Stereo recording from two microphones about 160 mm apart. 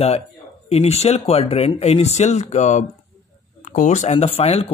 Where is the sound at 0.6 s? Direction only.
40° left (ahead or behind).